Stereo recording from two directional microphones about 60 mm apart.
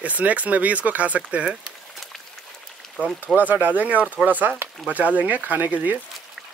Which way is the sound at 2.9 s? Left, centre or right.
Right.